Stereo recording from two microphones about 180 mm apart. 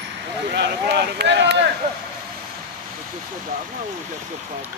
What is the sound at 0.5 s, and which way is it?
Speech, 65° right (ahead or behind).